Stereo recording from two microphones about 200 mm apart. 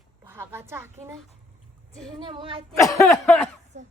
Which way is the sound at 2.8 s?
15° left (ahead or behind).